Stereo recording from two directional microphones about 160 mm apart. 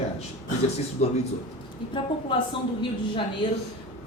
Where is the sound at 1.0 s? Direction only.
45° left (ahead or behind).